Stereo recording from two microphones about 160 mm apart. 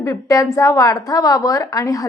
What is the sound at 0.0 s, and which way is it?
A woman's voice, 20° left (ahead or behind).